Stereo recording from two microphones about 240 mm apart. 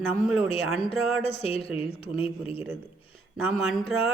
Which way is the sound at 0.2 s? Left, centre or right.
Left.